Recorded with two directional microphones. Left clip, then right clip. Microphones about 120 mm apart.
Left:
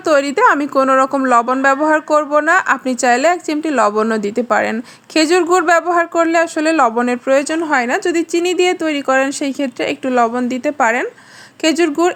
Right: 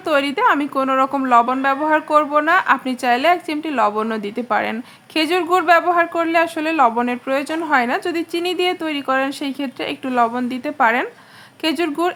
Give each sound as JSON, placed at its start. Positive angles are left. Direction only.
{"t": 0.1, "sound": "a woman's voice", "side_deg": 40}